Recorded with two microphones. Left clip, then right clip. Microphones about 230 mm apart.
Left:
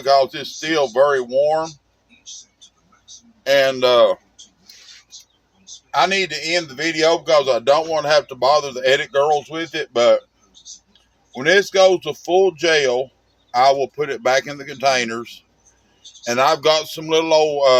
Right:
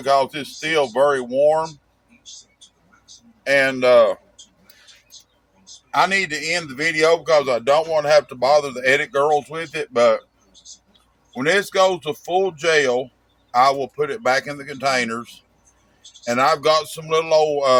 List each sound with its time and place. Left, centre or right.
0.0 s a man's voice: centre
3.4 s speech: centre
5.9 s a man's voice: centre
11.3 s a man's voice: centre